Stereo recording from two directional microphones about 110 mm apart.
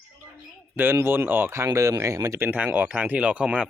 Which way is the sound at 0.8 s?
20° right (ahead or behind).